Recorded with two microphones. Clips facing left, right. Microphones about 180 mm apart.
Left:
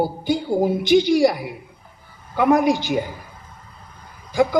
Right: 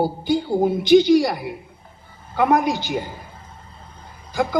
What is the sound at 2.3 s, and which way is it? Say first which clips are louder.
Speech: left 2 dB; 50° left (ahead or behind).